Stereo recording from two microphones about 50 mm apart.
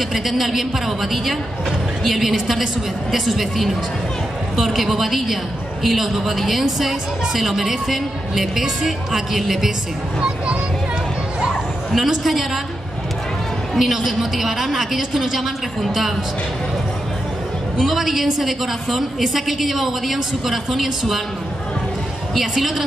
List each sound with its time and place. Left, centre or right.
0.1 s a woman's voice: centre
10.2 s a child's voice: right
11.4 s a sound: centre
13.7 s a woman's voice: centre
17.7 s a woman's voice: centre
22.3 s a woman's voice: centre